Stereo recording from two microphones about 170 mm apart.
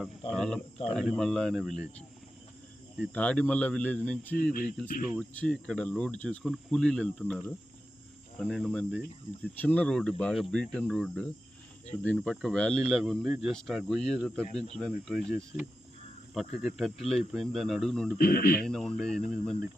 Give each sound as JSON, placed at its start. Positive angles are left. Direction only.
{"t": 0.0, "sound": "cricket", "side_deg": 0}
{"t": 0.9, "sound": "speech", "side_deg": 5}
{"t": 3.2, "sound": "speech", "side_deg": 5}
{"t": 16.7, "sound": "speech", "side_deg": 0}
{"t": 18.2, "sound": "speech", "side_deg": 60}
{"t": 18.6, "sound": "speech", "side_deg": 5}